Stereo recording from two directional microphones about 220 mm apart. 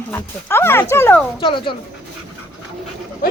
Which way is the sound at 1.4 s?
25° left (ahead or behind).